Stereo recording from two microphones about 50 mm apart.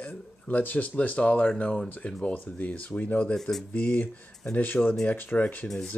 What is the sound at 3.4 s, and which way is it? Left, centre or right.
Speech, centre.